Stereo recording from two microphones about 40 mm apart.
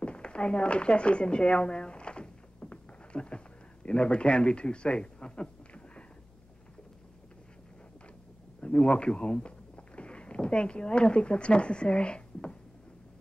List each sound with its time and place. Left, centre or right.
0.0 s a woman's voice: left
2.6 s a sound: left
8.5 s speech: left